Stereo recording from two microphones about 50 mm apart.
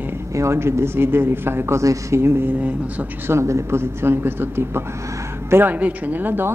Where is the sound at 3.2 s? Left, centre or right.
Right.